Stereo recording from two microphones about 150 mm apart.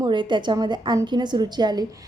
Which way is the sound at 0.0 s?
30° right (ahead or behind).